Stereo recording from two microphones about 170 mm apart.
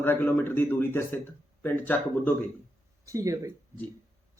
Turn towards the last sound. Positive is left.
turn(degrees=-20)  # may be behind; listen again after turning